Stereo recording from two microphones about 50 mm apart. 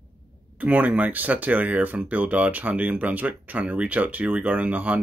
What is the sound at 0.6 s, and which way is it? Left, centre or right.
Speech, right.